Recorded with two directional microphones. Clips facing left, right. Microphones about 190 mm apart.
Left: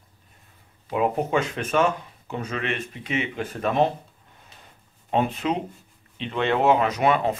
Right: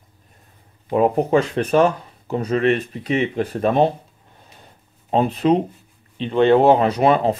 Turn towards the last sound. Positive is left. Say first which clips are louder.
# right 5 dB
turn(degrees=-35)  # may be behind; listen again after turning